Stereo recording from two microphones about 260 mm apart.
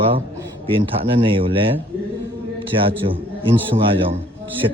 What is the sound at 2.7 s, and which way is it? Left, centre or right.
Speech, centre.